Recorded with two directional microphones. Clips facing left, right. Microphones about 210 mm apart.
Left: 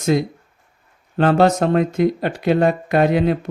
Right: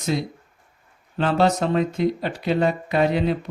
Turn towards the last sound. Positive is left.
turn(degrees=55)  # may be behind; listen again after turning